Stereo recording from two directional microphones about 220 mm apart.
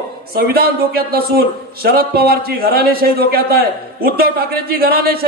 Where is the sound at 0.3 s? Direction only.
45° right (ahead or behind).